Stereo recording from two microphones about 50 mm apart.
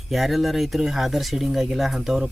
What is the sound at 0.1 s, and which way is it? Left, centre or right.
Speech, centre.